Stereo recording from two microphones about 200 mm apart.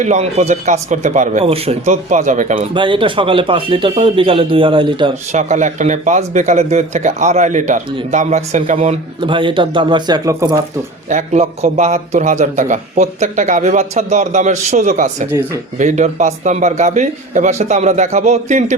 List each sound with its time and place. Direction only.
0.0 s a man's voice: 35° right (ahead or behind)
2.7 s a man's voice: 25° right (ahead or behind)
5.3 s a man's voice: 35° right (ahead or behind); by 10.6 s 20° right (ahead or behind)
11.1 s a man's voice: 35° right (ahead or behind)